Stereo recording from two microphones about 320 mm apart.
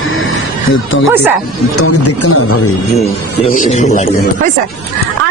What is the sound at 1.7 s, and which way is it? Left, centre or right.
A man's voice, left.